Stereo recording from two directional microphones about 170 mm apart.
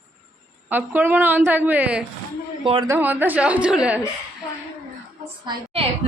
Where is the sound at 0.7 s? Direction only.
10° right (ahead or behind).